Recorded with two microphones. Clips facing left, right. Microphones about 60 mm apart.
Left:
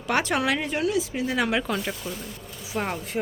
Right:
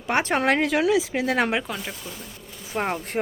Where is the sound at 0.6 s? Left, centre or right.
Right.